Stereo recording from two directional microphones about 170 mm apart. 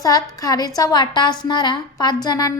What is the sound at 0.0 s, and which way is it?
A woman's voice, 20° left (ahead or behind).